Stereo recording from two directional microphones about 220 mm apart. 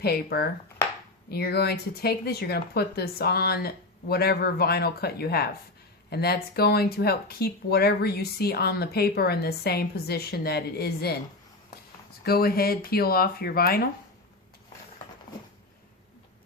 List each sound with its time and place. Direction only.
0.0 s speech: 45° left (ahead or behind)
12.2 s speech: 45° left (ahead or behind)